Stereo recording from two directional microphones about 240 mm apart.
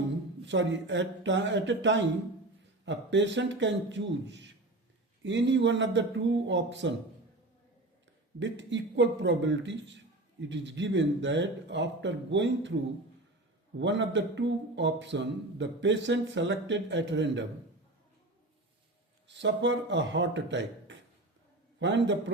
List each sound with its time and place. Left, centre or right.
0.4 s speech: right
8.4 s speech: right
13.7 s speech: right
19.3 s a man's voice: right